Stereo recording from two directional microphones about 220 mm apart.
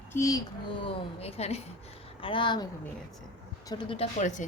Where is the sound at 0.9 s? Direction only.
30° left (ahead or behind).